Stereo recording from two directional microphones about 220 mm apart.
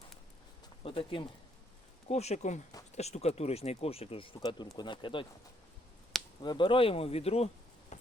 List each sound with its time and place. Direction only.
0.8 s speech: 25° left (ahead or behind)
6.4 s speech: 20° left (ahead or behind)